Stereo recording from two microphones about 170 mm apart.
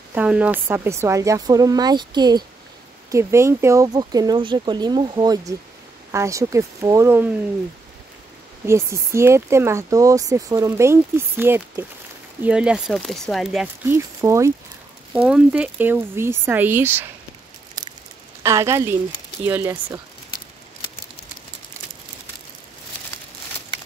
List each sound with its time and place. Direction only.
0.1 s speech: 10° right (ahead or behind)
8.6 s speech: 15° right (ahead or behind); by 13.7 s centre (ahead or behind)
13.8 s speech: 15° right (ahead or behind)
15.1 s speech: 5° right (ahead or behind)
18.4 s speech: 15° right (ahead or behind)